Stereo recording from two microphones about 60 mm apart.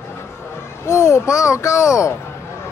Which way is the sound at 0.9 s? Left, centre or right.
Left.